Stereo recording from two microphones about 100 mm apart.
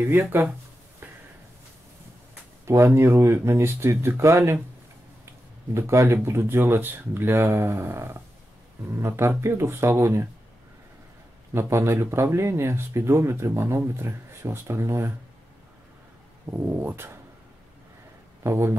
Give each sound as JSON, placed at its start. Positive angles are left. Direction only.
{"t": 2.6, "sound": "speech", "side_deg": -25}
{"t": 5.8, "sound": "speech", "side_deg": -30}
{"t": 11.5, "sound": "speech", "side_deg": -25}
{"t": 16.4, "sound": "speech", "side_deg": -25}
{"t": 18.4, "sound": "speech", "side_deg": -25}